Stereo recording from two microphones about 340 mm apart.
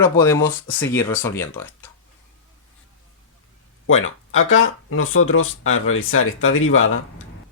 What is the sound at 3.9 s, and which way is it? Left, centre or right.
Speech, left.